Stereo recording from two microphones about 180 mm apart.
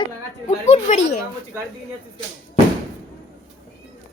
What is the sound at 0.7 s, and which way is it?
Speech, 40° left (ahead or behind).